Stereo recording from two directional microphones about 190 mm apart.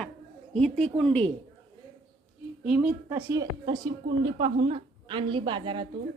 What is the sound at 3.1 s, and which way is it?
A woman's voice, 20° right (ahead or behind).